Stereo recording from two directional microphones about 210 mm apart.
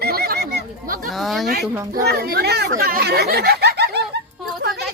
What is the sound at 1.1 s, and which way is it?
Speech, centre (ahead or behind).